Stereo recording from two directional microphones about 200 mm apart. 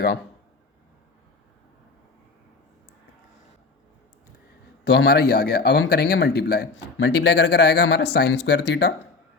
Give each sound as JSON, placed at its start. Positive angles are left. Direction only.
{"t": 4.9, "sound": "a man's voice", "side_deg": 55}